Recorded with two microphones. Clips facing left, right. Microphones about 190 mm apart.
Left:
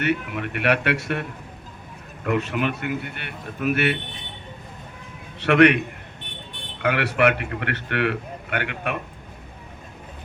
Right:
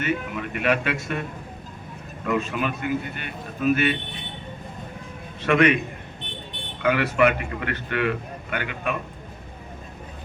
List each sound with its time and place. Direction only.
0.0 s a man's voice: 65° left (ahead or behind)
5.4 s a man's voice: 65° left (ahead or behind)
6.8 s a man's voice: 70° left (ahead or behind)